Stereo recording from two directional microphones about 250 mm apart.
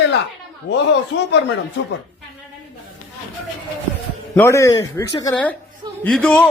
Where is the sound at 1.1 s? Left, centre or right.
Left.